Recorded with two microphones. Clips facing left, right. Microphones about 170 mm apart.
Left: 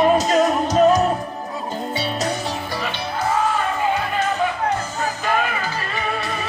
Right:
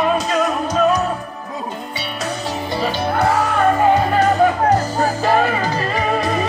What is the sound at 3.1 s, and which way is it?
Music, 70° right (ahead or behind).